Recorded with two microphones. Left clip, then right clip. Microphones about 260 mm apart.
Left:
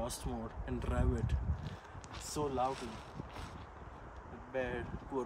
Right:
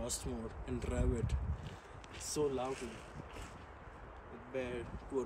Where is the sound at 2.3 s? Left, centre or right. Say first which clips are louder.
Left 1 dB; centre.